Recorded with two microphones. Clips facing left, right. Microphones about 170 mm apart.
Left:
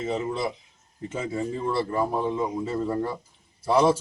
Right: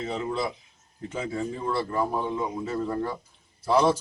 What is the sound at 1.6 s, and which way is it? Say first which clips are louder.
A man's voice: left 1 dB; 25° left (ahead or behind).